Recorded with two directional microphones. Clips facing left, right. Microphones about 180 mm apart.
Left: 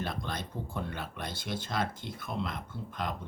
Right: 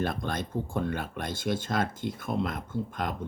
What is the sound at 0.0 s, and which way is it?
Speech, 50° right (ahead or behind).